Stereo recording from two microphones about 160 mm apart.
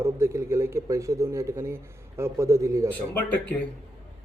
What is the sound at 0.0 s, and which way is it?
Speech, 15° right (ahead or behind).